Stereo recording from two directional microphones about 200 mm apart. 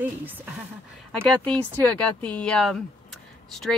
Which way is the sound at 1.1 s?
5° left (ahead or behind).